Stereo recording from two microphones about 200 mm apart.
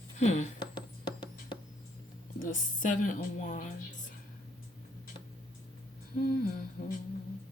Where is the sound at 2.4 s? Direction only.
40° left (ahead or behind).